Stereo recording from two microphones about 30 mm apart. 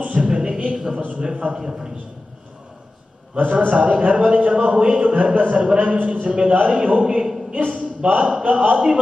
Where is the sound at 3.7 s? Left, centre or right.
Right.